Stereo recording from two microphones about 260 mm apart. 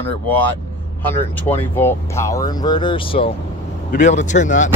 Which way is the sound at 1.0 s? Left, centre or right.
Centre.